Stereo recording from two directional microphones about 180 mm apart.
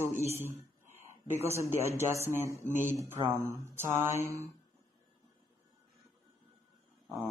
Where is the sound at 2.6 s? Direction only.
45° left (ahead or behind).